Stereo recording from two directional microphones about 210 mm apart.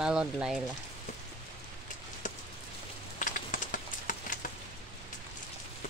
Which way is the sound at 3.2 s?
40° left (ahead or behind).